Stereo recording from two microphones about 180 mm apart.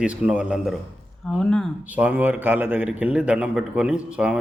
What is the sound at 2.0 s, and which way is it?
A man's voice, 10° right (ahead or behind).